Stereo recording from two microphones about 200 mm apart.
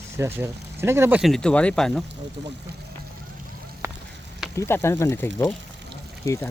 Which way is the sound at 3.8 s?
15° right (ahead or behind).